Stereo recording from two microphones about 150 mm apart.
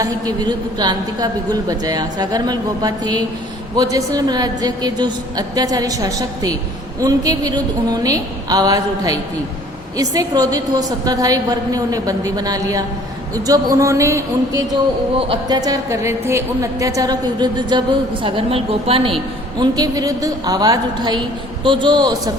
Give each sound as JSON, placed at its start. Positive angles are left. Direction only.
{"t": 0.0, "sound": "a woman's voice", "side_deg": -25}
{"t": 19.5, "sound": "a woman's voice", "side_deg": -25}